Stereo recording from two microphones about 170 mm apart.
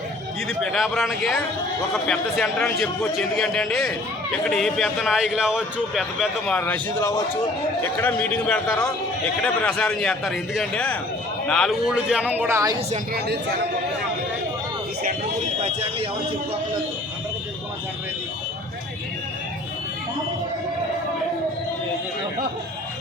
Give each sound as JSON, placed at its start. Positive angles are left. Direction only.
{"t": 0.4, "sound": "a man's voice", "side_deg": 0}
{"t": 6.6, "sound": "a man's voice", "side_deg": 15}
{"t": 13.1, "sound": "speech", "side_deg": -70}